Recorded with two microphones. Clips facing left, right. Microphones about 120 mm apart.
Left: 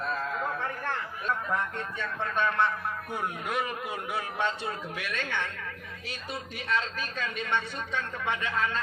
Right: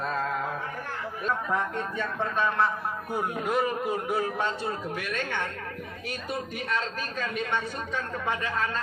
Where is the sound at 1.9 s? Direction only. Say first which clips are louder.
Right 1 dB; 35° right (ahead or behind).